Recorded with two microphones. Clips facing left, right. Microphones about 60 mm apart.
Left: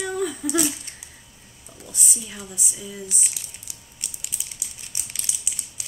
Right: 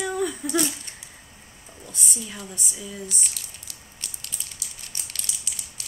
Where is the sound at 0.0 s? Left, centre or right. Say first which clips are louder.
Even; centre.